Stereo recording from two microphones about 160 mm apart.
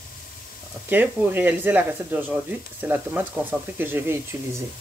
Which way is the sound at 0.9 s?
10° right (ahead or behind).